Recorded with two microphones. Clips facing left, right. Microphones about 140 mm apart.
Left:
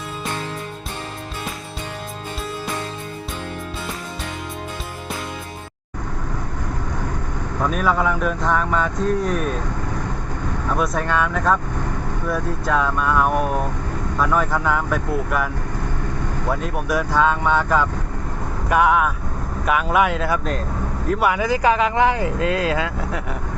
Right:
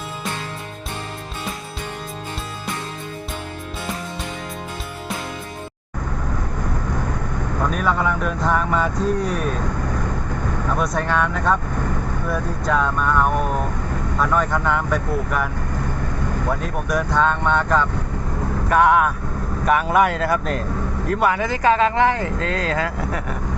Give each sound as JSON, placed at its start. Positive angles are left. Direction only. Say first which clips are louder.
{"t": 7.7, "sound": "speech", "louder": "left 2 dB", "side_deg": 0}
{"t": 10.8, "sound": "speech", "louder": "left 1 dB", "side_deg": 0}
{"t": 16.5, "sound": "speech", "louder": "left 2 dB", "side_deg": 5}